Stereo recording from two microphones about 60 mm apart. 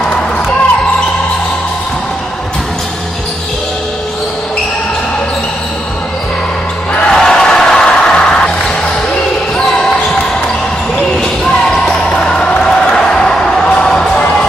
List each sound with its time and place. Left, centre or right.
6.9 s music: centre
11.8 s basketball bounce: centre
12.9 s music: centre